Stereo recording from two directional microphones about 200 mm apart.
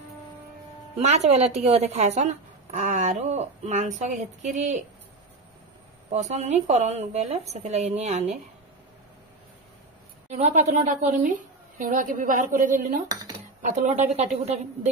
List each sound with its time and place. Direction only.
1.0 s speech: 35° right (ahead or behind)
6.0 s speech: 35° right (ahead or behind)
10.2 s speech: 35° right (ahead or behind)